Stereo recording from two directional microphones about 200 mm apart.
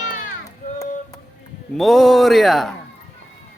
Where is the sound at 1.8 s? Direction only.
Centre (ahead or behind).